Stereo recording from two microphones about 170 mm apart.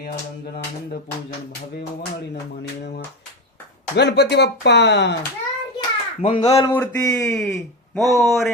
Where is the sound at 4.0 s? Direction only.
80° left.